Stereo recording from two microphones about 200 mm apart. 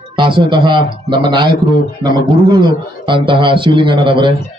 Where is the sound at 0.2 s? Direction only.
25° right (ahead or behind).